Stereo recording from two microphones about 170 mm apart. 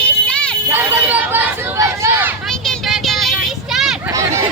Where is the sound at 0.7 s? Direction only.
10° right (ahead or behind).